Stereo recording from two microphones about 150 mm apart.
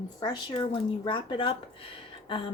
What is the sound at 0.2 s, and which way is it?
Speech, 30° left (ahead or behind).